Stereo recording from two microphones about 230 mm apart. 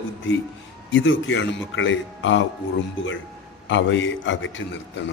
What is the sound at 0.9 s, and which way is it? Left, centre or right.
Speech, left.